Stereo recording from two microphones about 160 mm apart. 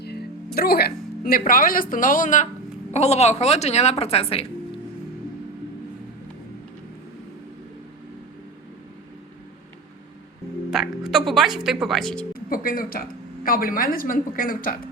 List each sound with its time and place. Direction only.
0.0 s a woman's voice: 80° left; by 4.4 s 40° left (ahead or behind)
10.7 s speech: centre (ahead or behind)
12.3 s speech: 65° left (ahead or behind)